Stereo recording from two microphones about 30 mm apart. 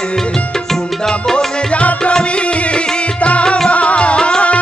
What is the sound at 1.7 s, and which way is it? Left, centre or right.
Music, left.